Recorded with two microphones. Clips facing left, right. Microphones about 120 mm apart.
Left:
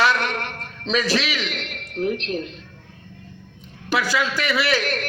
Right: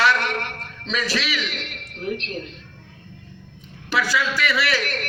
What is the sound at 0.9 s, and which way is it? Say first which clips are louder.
A man's voice: left 4 dB; 25° left (ahead or behind).